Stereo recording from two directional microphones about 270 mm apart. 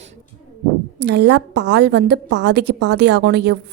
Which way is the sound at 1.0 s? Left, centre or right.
Right.